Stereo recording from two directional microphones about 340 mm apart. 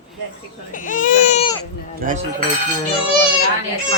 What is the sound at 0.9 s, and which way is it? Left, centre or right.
Baby cry, left.